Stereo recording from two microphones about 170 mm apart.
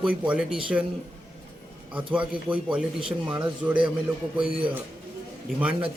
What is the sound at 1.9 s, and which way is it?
Speech, 10° right (ahead or behind).